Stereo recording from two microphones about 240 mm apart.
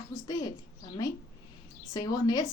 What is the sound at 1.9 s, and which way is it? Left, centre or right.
Speech, centre.